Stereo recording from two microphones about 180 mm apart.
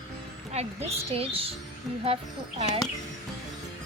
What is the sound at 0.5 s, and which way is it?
A woman's voice, 35° right (ahead or behind).